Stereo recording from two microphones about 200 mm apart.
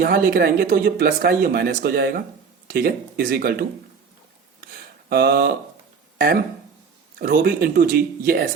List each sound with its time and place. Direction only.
0.0 s speech: 50° right (ahead or behind)
4.7 s a sound: 50° right (ahead or behind)
6.1 s speech: 50° right (ahead or behind)